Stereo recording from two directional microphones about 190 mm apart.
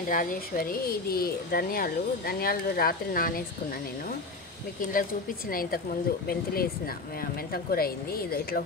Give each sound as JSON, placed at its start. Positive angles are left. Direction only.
{"t": 0.1, "sound": "speech", "side_deg": 45}
{"t": 5.5, "sound": "speech", "side_deg": 50}